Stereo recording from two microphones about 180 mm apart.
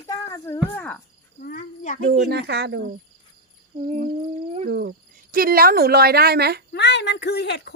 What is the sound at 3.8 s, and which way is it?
Speech, 35° right (ahead or behind).